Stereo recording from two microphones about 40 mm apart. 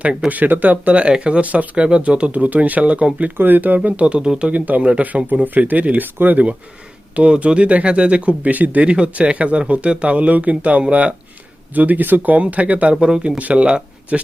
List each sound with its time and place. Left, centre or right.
0.3 s speech: right
1.2 s speech: right
3.3 s speech: right
3.8 s speech: right
4.8 s speech: right
5.3 s speech: right
11.7 s speech: right
13.0 s speech: right
13.4 s speech: right